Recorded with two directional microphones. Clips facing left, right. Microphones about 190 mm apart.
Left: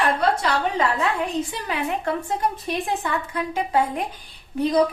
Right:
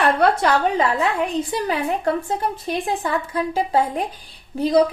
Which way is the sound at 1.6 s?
35° right (ahead or behind).